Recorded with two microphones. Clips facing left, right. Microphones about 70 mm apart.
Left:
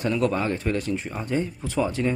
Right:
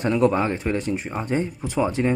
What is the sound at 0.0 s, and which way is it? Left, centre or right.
Speech, right.